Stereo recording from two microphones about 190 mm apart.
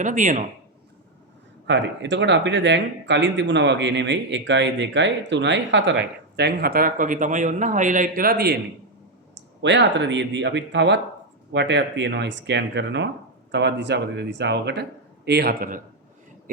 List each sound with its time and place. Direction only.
0.0 s speech: 40° right (ahead or behind)
1.6 s speech: 70° right (ahead or behind)
6.3 s a man's voice: 55° right (ahead or behind)
9.6 s speech: 70° right (ahead or behind); by 15.8 s 50° right (ahead or behind)